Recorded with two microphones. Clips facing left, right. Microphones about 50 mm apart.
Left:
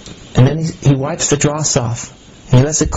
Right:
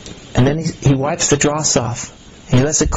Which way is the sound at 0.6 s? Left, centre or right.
Right.